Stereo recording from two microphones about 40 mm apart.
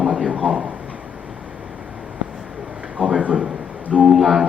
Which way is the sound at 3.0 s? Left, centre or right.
Centre.